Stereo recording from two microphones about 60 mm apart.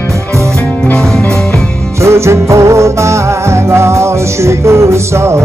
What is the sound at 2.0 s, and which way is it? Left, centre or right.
Music, right.